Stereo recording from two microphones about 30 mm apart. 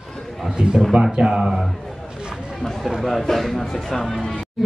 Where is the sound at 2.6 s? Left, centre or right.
Centre.